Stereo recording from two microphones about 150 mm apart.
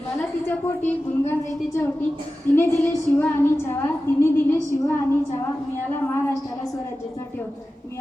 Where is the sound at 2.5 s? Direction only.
15° left (ahead or behind).